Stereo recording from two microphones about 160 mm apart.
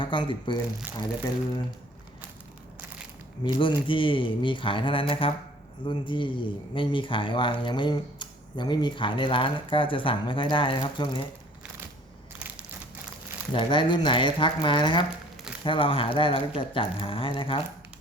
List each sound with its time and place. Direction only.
0.0 s speech: 30° left (ahead or behind)
3.4 s speech: 30° left (ahead or behind)
13.5 s speech: 30° left (ahead or behind)